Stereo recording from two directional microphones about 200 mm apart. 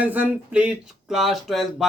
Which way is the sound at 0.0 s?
10° right (ahead or behind).